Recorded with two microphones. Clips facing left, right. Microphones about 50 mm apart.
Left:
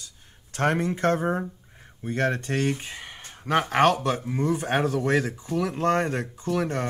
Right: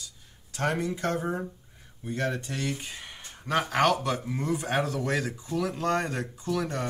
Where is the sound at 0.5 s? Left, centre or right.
Left.